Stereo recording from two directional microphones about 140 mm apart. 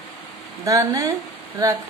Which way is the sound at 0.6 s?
25° right (ahead or behind).